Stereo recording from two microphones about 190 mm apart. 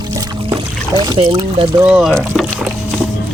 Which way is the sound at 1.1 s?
25° right (ahead or behind).